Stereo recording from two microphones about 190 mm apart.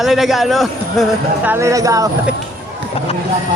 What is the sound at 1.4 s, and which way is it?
Speech, 15° right (ahead or behind).